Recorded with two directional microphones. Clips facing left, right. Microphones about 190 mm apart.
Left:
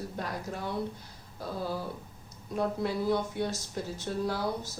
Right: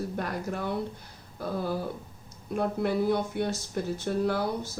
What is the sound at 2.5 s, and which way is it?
Speech, 60° right (ahead or behind).